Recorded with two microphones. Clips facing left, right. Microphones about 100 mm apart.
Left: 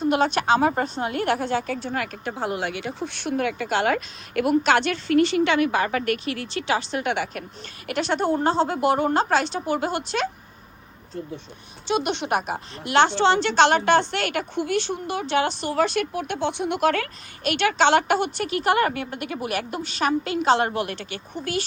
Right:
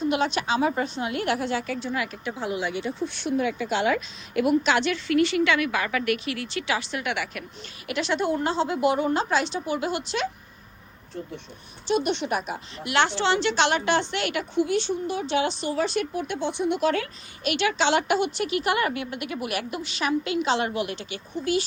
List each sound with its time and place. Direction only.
0.0 s a woman's voice: 45° left (ahead or behind)
7.9 s a woman's voice: 45° left (ahead or behind)
11.9 s a woman's voice: 90° left; by 12.5 s 70° left (ahead or behind)
12.8 s a woman's voice: 35° left (ahead or behind); by 21.6 s 55° left (ahead or behind)